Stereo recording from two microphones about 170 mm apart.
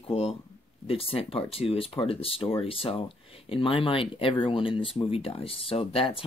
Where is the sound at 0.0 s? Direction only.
35° left (ahead or behind).